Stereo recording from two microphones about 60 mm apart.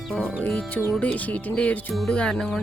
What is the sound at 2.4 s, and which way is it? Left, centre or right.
Speech, centre.